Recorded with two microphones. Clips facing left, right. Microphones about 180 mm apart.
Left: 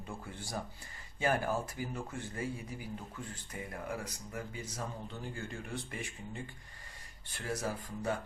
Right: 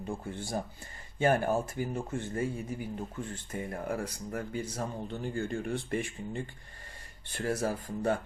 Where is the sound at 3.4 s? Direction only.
50° right (ahead or behind).